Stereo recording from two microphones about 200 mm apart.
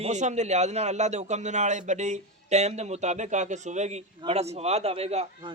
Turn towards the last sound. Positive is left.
turn(degrees=-30)  # may be behind; listen again after turning